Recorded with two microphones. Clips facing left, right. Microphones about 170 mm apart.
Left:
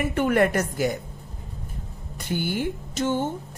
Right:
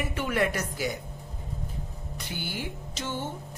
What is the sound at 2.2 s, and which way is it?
Speech, 50° left (ahead or behind).